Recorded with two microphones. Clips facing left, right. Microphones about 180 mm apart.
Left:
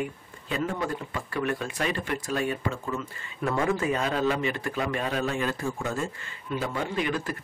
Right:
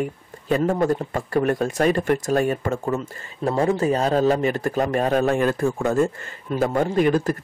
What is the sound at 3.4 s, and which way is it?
Speech, 35° right (ahead or behind).